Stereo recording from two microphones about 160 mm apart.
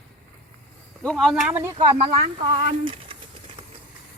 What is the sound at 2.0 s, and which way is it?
Speech, 35° right (ahead or behind).